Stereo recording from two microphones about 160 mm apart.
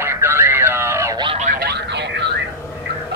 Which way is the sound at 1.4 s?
70° right (ahead or behind).